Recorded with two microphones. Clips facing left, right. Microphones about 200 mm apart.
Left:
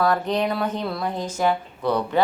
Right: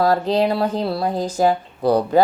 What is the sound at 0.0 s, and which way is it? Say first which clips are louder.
Speech: right 4 dB; 30° right (ahead or behind).